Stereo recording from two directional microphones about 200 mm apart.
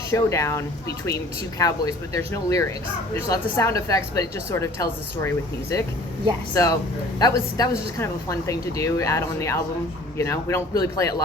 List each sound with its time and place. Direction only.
0.1 s speech: 15° left (ahead or behind)